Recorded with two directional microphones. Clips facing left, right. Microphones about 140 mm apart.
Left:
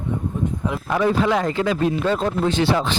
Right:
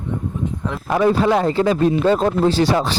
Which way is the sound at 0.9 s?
40° right (ahead or behind).